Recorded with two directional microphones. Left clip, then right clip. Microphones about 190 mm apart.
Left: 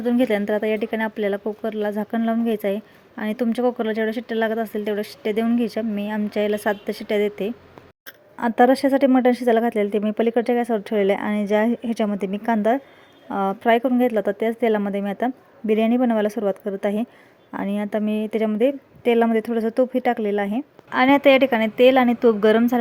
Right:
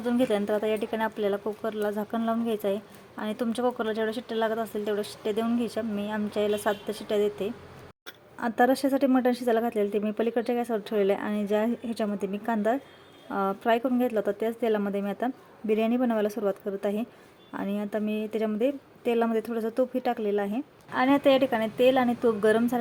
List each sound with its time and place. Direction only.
0.0 s a woman's voice: 30° left (ahead or behind)